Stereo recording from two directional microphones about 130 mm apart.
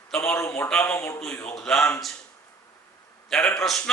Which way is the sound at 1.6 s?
5° left (ahead or behind).